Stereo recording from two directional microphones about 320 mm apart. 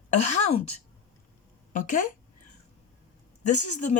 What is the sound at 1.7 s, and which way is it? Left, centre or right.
Speech, left.